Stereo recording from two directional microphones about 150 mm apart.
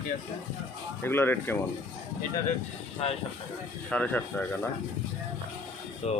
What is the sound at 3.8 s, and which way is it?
Speech, 10° left (ahead or behind).